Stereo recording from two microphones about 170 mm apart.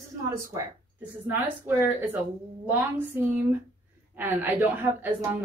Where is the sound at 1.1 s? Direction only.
15° right (ahead or behind).